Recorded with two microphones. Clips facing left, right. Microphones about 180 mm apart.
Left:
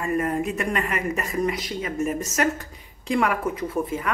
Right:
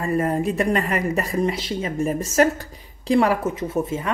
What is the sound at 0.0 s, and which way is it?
A woman's voice, 35° right (ahead or behind).